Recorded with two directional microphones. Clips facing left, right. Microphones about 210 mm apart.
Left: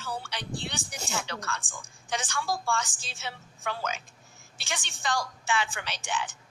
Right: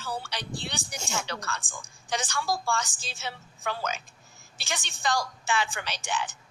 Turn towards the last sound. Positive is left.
turn(degrees=-40)  # may be behind; listen again after turning